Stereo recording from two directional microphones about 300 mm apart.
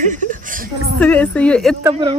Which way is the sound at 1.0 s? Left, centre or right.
Centre.